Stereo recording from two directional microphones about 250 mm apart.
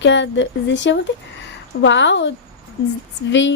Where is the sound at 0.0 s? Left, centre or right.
Left.